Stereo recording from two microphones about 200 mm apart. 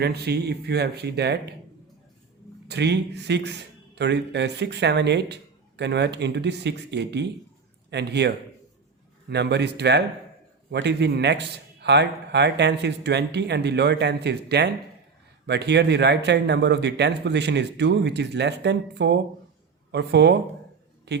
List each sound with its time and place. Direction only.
0.0 s speech: 55° right (ahead or behind)
2.6 s a man's voice: 55° right (ahead or behind)